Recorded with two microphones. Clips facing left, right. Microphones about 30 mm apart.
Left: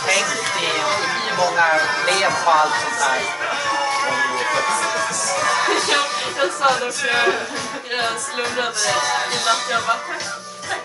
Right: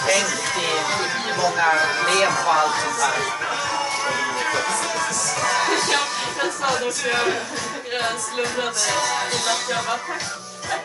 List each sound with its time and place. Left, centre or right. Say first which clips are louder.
0.0 s music: left 1 dB; centre